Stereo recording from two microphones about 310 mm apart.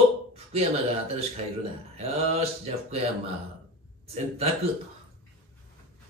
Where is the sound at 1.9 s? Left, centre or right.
Centre.